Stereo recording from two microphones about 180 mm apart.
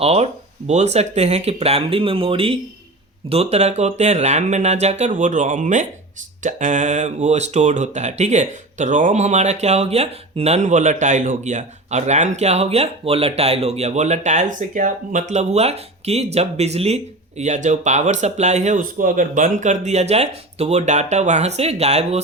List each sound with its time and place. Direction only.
0.0 s speech: 35° right (ahead or behind)